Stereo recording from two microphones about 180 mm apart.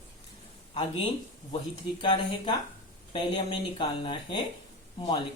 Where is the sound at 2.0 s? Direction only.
25° left (ahead or behind).